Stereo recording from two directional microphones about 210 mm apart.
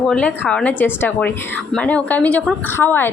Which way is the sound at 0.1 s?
5° left (ahead or behind).